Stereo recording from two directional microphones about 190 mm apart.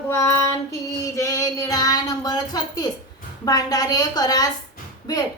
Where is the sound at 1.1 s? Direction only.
15° left (ahead or behind).